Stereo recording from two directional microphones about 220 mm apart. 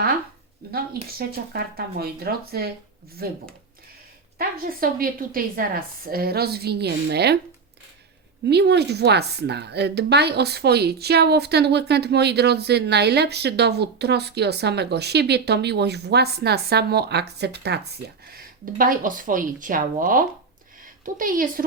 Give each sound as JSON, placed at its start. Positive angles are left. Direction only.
{"t": 0.6, "sound": "a woman's voice", "side_deg": -45}
{"t": 4.4, "sound": "a woman's voice", "side_deg": -40}
{"t": 8.4, "sound": "a woman's voice", "side_deg": -50}